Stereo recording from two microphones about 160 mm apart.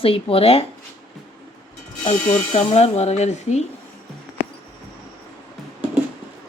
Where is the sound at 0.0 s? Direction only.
35° left (ahead or behind).